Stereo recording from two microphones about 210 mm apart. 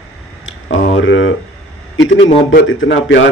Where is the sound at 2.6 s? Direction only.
65° left (ahead or behind).